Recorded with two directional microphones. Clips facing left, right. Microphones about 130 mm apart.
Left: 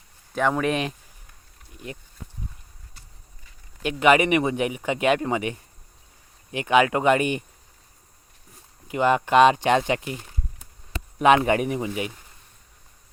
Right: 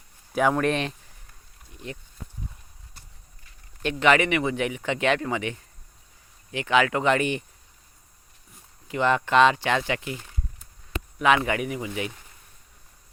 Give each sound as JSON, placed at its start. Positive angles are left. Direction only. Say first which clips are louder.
{"t": 0.3, "sound": "speech", "louder": "even", "side_deg": 0}
{"t": 3.8, "sound": "speech", "louder": "left 2 dB", "side_deg": 15}
{"t": 8.9, "sound": "speech", "louder": "left 2 dB", "side_deg": 15}